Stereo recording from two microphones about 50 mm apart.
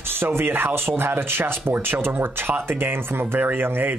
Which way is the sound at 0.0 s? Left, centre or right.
Right.